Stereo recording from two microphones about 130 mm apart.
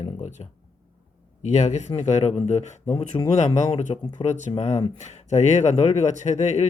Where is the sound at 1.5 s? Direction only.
60° left (ahead or behind).